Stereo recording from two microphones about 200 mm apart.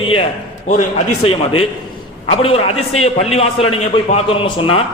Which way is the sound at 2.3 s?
30° left (ahead or behind).